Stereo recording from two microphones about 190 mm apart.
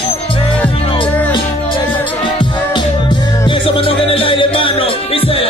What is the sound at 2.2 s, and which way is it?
Music, 25° left (ahead or behind).